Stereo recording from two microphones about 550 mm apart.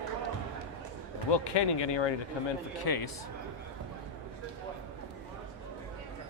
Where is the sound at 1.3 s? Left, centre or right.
Left.